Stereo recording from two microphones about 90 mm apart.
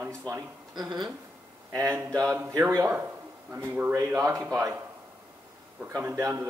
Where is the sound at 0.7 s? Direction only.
50° right (ahead or behind).